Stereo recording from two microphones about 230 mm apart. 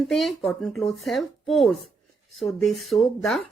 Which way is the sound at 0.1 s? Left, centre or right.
Centre.